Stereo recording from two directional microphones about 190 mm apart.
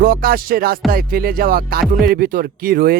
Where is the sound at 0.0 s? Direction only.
50° right (ahead or behind).